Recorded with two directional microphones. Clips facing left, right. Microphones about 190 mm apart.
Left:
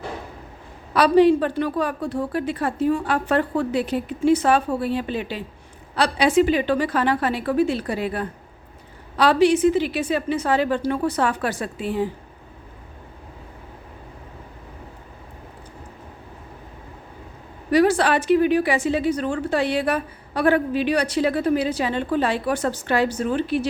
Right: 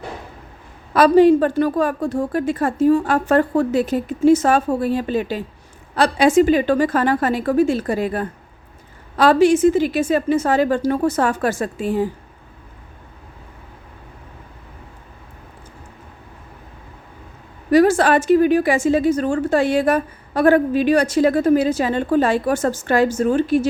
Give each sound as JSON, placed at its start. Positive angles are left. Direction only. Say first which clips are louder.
{"t": 0.9, "sound": "a woman's voice", "louder": "right 4 dB", "side_deg": -45}
{"t": 17.7, "sound": "a woman's voice", "louder": "right 4 dB", "side_deg": -45}